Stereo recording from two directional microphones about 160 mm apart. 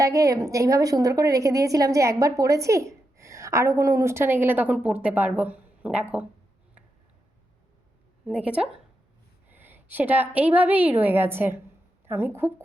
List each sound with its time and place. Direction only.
0.0 s a woman's voice: 20° right (ahead or behind)
8.3 s a woman's voice: 10° right (ahead or behind)